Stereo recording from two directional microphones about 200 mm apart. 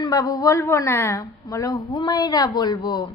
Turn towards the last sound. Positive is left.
turn(degrees=20)  # may be behind; listen again after turning